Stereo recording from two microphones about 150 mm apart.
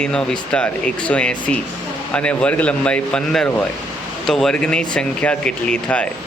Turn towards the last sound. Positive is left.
turn(degrees=10)  # may be behind; listen again after turning